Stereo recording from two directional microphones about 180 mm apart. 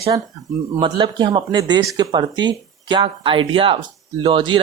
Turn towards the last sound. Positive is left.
turn(degrees=-25)  # may be behind; listen again after turning